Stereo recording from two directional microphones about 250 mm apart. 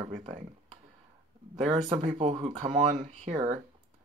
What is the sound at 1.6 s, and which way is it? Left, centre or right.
Speech, right.